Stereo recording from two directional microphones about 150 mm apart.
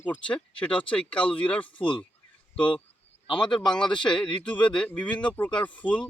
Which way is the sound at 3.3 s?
5° left (ahead or behind).